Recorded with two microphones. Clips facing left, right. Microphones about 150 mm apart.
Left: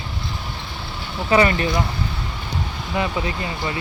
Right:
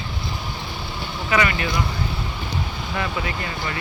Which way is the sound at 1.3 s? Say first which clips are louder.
Left 5 dB; 35° left (ahead or behind).